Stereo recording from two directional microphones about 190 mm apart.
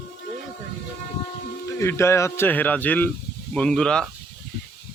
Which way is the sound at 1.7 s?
15° left (ahead or behind).